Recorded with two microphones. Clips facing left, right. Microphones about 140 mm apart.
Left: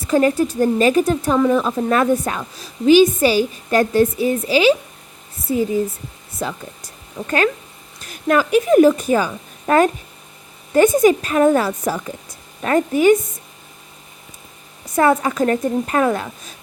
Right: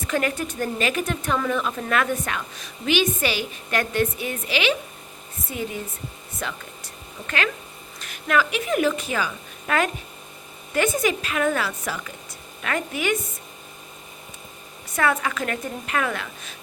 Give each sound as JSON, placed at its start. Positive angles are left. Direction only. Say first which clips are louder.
{"t": 0.0, "sound": "a woman's voice", "louder": "left 9 dB", "side_deg": 30}
{"t": 15.2, "sound": "a woman's voice", "louder": "left 9 dB", "side_deg": 35}